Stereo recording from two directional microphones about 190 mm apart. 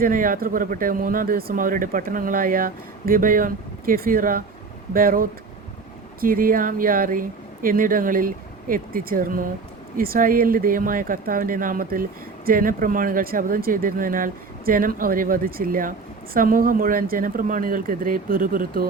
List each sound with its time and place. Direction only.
0.0 s speech: 45° right (ahead or behind)